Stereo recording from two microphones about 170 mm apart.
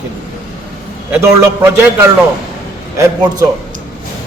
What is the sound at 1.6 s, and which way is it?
Speech, 15° right (ahead or behind).